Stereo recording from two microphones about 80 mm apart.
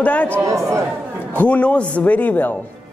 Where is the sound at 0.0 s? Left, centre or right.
Centre.